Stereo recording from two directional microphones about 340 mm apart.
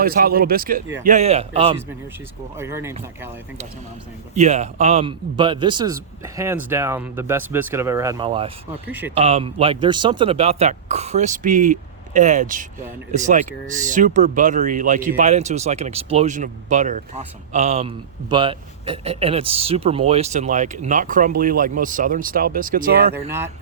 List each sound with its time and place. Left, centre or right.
0.0 s a man's voice: right; by 3.2 s centre
4.4 s a man's voice: centre
8.9 s speech: centre
9.1 s speech: centre
23.1 s a man's voice: centre